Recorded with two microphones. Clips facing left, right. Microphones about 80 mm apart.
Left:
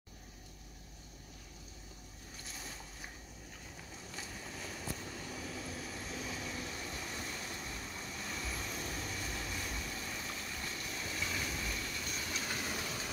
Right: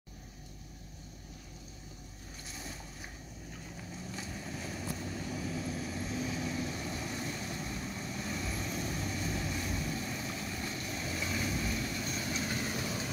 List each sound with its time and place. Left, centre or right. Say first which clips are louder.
4.1 s vehicle: right 4 dB; centre; by 12.3 s right
12.3 s train: right 3 dB; centre